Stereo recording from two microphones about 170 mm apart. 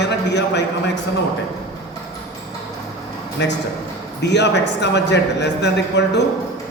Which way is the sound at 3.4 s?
90° left.